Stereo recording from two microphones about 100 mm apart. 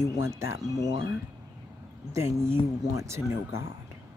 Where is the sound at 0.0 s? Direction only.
25° right (ahead or behind).